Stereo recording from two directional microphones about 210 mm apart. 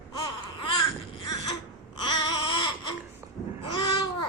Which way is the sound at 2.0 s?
20° left (ahead or behind).